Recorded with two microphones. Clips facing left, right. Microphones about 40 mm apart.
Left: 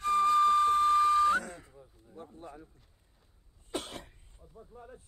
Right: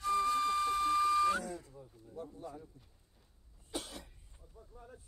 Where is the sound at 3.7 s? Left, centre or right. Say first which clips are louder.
Left 5 dB; left.